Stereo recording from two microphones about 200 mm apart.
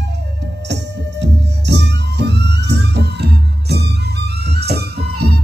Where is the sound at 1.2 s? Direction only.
60° right (ahead or behind).